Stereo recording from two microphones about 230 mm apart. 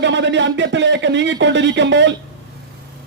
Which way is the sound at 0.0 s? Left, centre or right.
Right.